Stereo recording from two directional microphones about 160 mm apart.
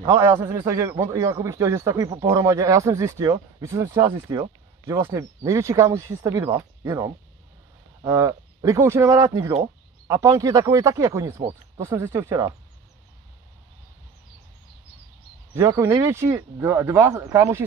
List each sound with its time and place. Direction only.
0.1 s a man's voice: 15° right (ahead or behind)
15.5 s a man's voice: 20° right (ahead or behind)